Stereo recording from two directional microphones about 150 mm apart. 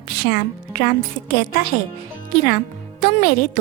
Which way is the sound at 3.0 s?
90° left.